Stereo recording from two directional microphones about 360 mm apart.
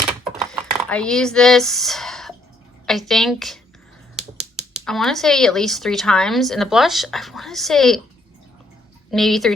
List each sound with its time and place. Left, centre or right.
0.5 s speech: centre
4.2 s finger snapping: centre
4.9 s speech: centre
9.0 s speech: centre